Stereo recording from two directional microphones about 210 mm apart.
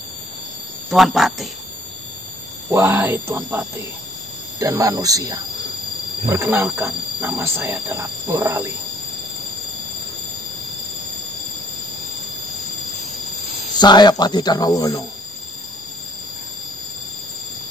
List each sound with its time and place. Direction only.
0.8 s speech: centre (ahead or behind)
2.7 s speech: 10° right (ahead or behind)
13.7 s speech: 20° left (ahead or behind)